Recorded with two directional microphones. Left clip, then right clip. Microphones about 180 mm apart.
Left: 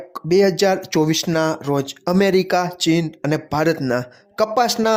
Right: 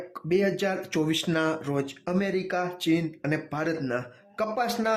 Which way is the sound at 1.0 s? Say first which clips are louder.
Left 4 dB; 25° left (ahead or behind).